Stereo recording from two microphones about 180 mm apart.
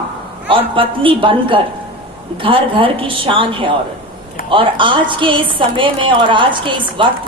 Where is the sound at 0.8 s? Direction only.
30° right (ahead or behind).